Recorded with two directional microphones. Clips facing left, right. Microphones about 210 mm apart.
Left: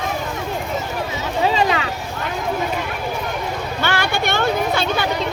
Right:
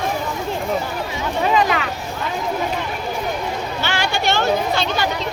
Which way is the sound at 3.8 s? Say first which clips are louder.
Left 1 dB; 55° left (ahead or behind).